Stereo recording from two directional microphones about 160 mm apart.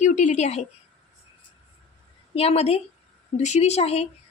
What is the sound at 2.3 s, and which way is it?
A woman's voice, 40° left (ahead or behind).